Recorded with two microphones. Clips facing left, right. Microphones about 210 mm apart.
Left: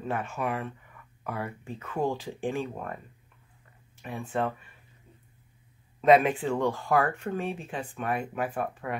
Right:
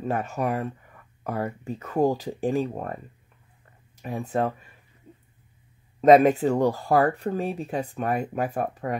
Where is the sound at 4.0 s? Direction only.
40° right (ahead or behind).